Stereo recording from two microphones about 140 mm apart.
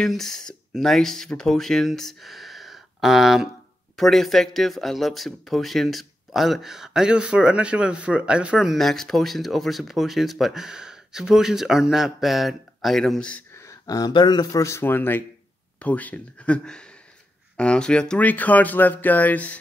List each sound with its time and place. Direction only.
0.0 s speech: centre (ahead or behind)
13.6 s speech: 25° left (ahead or behind)